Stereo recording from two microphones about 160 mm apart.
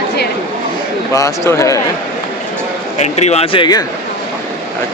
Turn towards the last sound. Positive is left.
turn(degrees=30)  # may be behind; listen again after turning